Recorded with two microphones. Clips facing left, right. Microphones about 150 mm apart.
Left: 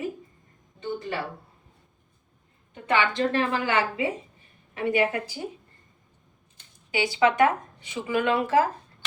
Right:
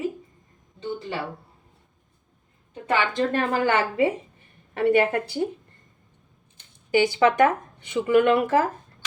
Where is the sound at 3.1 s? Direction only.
50° right (ahead or behind).